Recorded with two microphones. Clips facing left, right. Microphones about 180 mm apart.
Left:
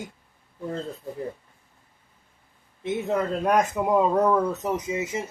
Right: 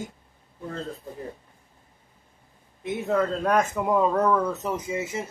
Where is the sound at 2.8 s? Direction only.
20° left (ahead or behind).